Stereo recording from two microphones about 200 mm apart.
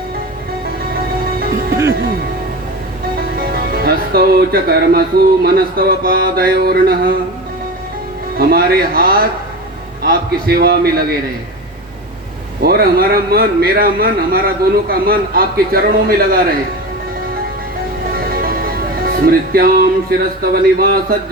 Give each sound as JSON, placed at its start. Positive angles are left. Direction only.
{"t": 1.9, "sound": "speech", "side_deg": -50}
{"t": 3.3, "sound": "speech", "side_deg": -50}
{"t": 8.4, "sound": "speech", "side_deg": -50}
{"t": 12.6, "sound": "speech", "side_deg": -50}
{"t": 19.0, "sound": "speech", "side_deg": -45}